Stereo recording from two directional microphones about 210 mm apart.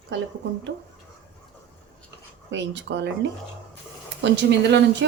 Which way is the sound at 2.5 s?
60° right (ahead or behind).